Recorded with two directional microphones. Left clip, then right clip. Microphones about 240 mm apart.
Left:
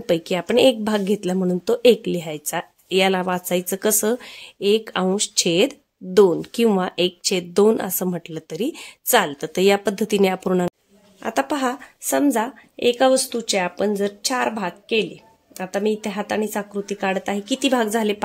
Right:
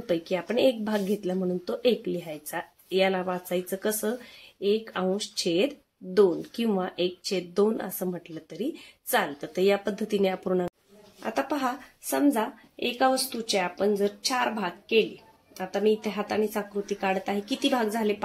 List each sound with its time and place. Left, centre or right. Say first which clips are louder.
0.0 s a woman's voice: left 7 dB; left